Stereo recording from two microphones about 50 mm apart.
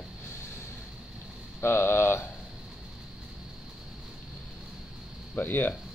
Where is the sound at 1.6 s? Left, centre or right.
Left.